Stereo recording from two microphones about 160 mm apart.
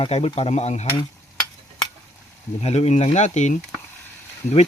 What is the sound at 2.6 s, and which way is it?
Speech, 45° left (ahead or behind).